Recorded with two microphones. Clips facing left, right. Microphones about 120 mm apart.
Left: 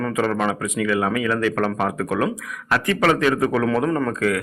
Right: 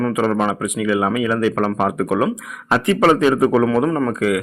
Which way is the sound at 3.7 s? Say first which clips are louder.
Right 3 dB; 5° right (ahead or behind).